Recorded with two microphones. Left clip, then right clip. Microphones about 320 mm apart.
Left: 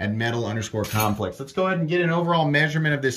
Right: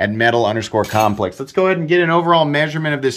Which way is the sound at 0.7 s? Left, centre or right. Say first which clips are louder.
Right 10 dB; right.